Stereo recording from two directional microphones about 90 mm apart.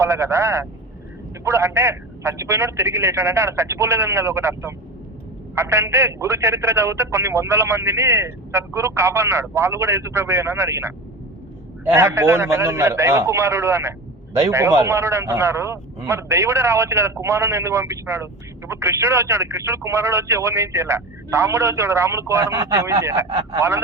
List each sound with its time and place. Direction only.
0.0 s speech: 30° right (ahead or behind)